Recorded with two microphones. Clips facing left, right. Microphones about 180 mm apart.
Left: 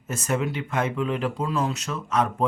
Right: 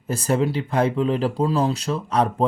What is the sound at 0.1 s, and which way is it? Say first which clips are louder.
Speech: right 5 dB; 30° right (ahead or behind).